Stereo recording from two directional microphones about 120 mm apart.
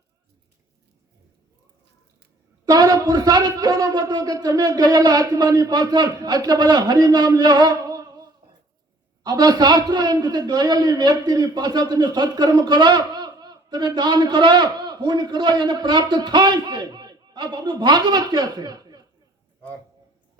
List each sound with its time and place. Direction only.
2.6 s a man's voice: 30° right (ahead or behind)